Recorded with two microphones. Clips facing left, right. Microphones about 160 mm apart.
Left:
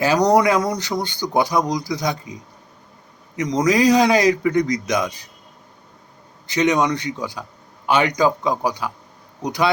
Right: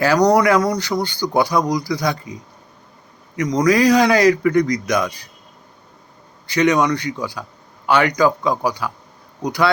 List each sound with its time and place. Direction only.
0.0 s speech: 20° left (ahead or behind)
6.5 s speech: 20° left (ahead or behind)